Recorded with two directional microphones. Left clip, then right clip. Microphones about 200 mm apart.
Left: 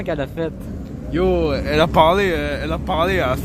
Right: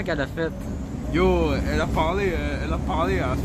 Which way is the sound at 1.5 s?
30° left (ahead or behind).